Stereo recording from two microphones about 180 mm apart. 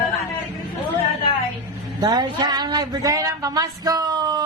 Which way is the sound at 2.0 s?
25° right (ahead or behind).